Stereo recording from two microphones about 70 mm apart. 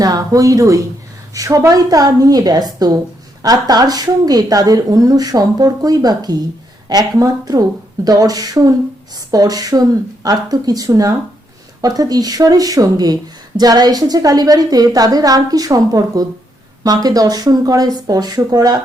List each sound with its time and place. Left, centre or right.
0.0 s speech: right